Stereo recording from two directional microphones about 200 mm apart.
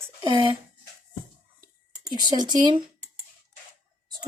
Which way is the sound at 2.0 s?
20° right (ahead or behind).